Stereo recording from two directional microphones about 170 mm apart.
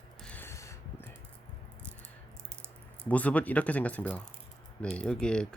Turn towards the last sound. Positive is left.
turn(degrees=5)  # may be behind; listen again after turning